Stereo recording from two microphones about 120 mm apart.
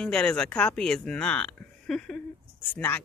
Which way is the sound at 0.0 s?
10° left (ahead or behind).